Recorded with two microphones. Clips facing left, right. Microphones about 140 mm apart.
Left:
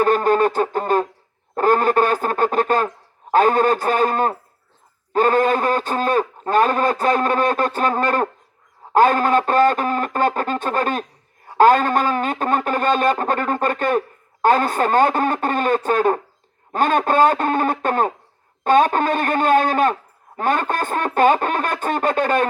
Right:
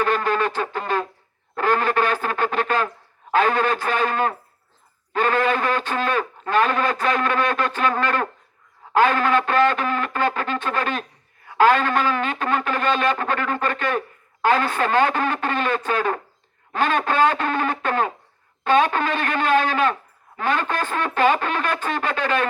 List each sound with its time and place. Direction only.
0.0 s music: 40° left (ahead or behind)
1.5 s speech: 45° left (ahead or behind)